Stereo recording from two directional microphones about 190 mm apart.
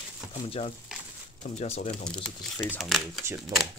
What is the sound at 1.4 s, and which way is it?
Speech, 35° left (ahead or behind).